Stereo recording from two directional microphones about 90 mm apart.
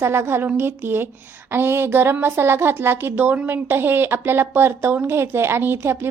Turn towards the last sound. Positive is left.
turn(degrees=-25)  # may be behind; listen again after turning